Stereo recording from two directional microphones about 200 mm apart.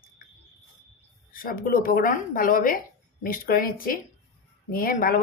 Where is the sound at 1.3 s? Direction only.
45° left (ahead or behind).